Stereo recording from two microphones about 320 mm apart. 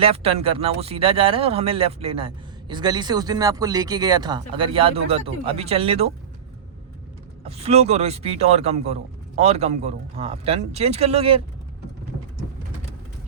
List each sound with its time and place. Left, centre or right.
0.0 s speech: centre
7.4 s a man's voice: centre